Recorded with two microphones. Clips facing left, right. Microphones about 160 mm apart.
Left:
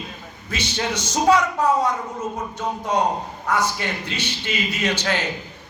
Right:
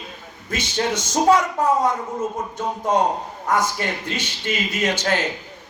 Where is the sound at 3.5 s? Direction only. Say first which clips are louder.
Right 1 dB; 45° right (ahead or behind).